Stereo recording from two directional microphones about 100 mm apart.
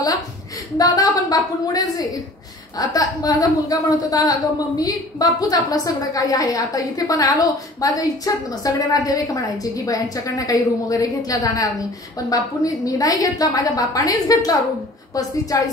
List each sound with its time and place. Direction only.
0.7 s a woman's voice: 40° left (ahead or behind)